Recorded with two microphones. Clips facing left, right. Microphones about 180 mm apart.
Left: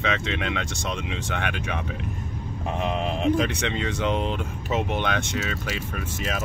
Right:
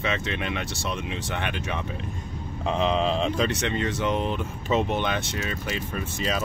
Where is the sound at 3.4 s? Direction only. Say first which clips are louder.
Right 1 dB; 15° left (ahead or behind).